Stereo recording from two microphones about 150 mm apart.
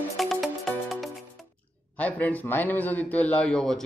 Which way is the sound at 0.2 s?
Centre (ahead or behind).